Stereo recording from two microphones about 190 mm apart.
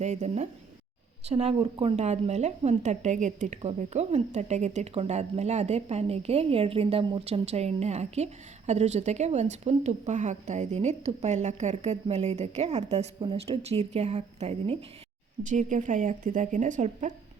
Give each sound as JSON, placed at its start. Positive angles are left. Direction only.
{"t": 0.0, "sound": "a woman's voice", "side_deg": -35}